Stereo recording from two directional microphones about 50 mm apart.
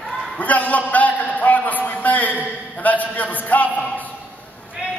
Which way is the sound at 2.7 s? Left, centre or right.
Left.